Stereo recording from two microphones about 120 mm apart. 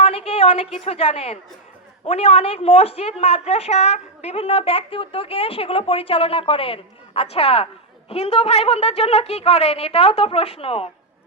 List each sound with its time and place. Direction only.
0.0 s a woman's voice: 55° left (ahead or behind)